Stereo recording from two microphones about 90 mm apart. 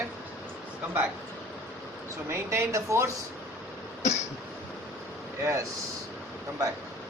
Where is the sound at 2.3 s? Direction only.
30° right (ahead or behind).